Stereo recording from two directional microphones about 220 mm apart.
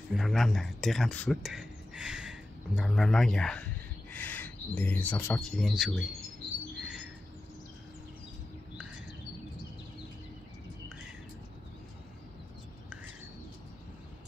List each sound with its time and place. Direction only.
0.1 s speech: centre (ahead or behind)
6.8 s bird: 5° right (ahead or behind)